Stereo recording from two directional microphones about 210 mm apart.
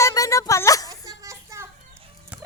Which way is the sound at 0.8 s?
15° right (ahead or behind).